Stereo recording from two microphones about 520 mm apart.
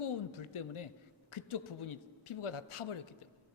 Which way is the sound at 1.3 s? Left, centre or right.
Left.